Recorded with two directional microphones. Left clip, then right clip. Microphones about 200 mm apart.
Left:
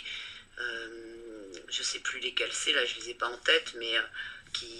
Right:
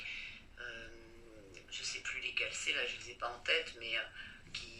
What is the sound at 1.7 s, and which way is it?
Speech, 40° left (ahead or behind).